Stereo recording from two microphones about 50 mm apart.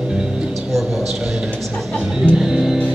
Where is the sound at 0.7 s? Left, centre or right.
Centre.